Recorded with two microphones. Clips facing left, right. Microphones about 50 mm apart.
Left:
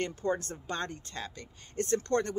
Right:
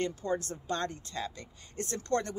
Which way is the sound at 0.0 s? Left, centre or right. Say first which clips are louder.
Left 1 dB; left.